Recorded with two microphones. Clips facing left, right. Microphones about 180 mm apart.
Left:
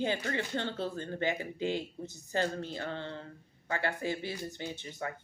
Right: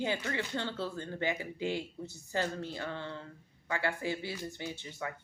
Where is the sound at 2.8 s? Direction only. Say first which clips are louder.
Left 1 dB; 55° left (ahead or behind).